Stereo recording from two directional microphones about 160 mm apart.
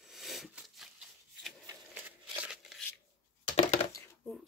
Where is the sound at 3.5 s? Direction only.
45° left (ahead or behind).